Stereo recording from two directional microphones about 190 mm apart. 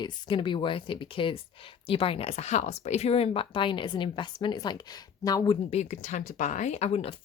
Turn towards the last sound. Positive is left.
turn(degrees=35)  # may be behind; listen again after turning